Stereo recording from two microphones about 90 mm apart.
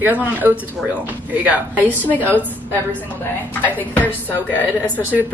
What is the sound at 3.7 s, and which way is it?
Speech, 20° left (ahead or behind).